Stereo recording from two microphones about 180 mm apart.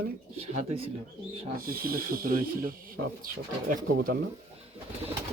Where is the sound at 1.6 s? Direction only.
55° right (ahead or behind).